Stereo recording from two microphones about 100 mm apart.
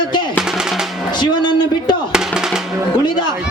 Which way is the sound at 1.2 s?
50° left (ahead or behind).